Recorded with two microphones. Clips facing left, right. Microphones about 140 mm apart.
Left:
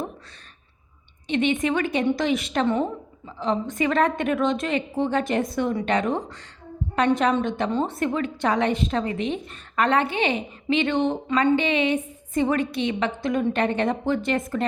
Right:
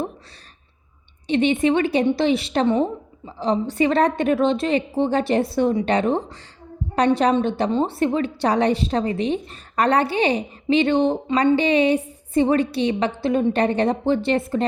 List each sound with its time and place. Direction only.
1.3 s a woman's voice: 35° right (ahead or behind)